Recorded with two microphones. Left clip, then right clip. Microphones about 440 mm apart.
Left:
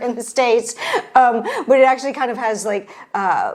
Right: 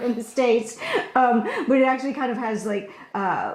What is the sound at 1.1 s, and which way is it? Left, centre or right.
A woman's voice, left.